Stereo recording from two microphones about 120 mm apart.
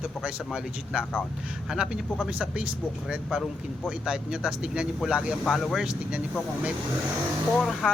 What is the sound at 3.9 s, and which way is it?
A man's voice, 5° right (ahead or behind).